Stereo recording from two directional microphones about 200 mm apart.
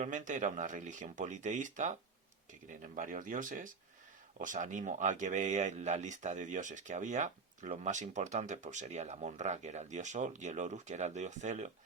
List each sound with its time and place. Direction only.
0.0 s speech: 40° right (ahead or behind)